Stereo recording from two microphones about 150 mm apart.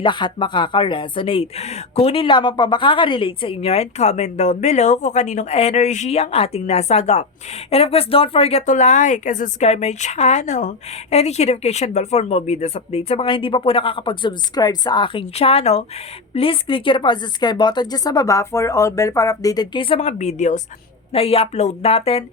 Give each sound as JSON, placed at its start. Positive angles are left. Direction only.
{"t": 0.0, "sound": "speech", "side_deg": 30}
{"t": 20.0, "sound": "speech", "side_deg": 50}
{"t": 21.1, "sound": "speech", "side_deg": 40}